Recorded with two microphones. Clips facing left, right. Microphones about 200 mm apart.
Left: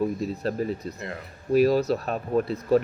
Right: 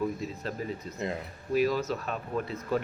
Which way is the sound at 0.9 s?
20° right (ahead or behind).